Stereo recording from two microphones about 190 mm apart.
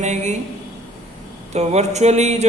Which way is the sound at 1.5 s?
35° right (ahead or behind).